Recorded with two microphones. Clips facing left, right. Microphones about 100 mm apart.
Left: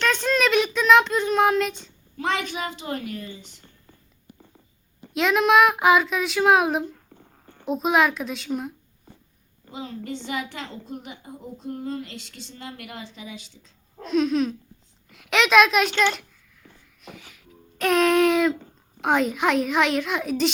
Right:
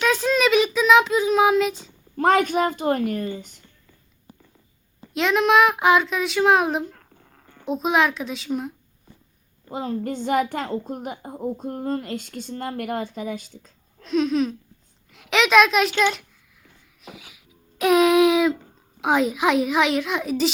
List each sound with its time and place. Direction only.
0.0 s child singing: 5° right (ahead or behind)
2.1 s a woman's voice: 45° right (ahead or behind)
5.1 s speech: centre (ahead or behind)
7.2 s a sound: 60° right (ahead or behind)
7.7 s speech: centre (ahead or behind)
9.6 s a woman's voice: 50° right (ahead or behind)
14.0 s speech: centre (ahead or behind)